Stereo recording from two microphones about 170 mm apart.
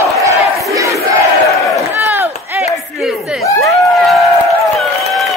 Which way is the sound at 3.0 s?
Centre (ahead or behind).